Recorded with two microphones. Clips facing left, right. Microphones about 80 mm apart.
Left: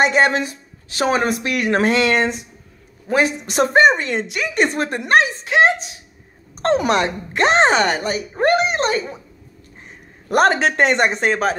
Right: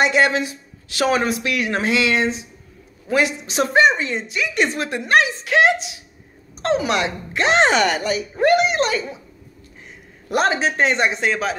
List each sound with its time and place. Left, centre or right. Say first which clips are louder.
0.0 s speech: left 1 dB; left
1.2 s speech: left 2 dB; left
3.1 s speech: left 1 dB; left
6.6 s speech: left 3 dB; left
10.2 s speech: left 4 dB; left